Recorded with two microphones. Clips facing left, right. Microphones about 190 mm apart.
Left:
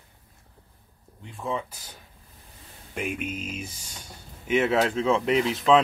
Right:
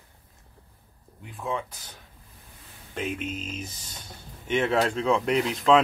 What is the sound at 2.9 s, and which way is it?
Speech, 10° left (ahead or behind).